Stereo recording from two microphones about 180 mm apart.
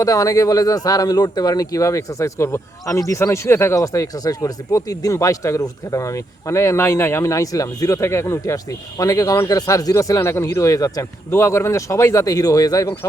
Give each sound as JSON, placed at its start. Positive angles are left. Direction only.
{"t": 0.0, "sound": "speech", "side_deg": 20}